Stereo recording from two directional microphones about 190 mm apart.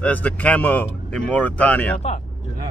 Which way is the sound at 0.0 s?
10° left (ahead or behind).